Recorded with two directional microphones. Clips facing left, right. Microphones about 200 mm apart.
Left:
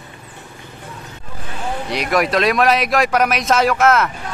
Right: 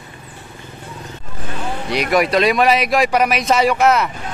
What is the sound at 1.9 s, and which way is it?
Speech, centre (ahead or behind).